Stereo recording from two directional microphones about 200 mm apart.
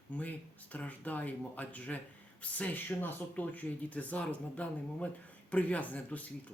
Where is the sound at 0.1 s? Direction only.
5° left (ahead or behind).